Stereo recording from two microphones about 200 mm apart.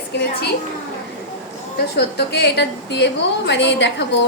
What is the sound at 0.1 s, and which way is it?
Speech, 60° left (ahead or behind).